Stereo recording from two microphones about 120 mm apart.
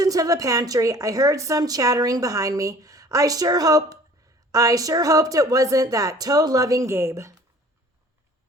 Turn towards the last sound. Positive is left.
turn(degrees=-25)  # may be behind; listen again after turning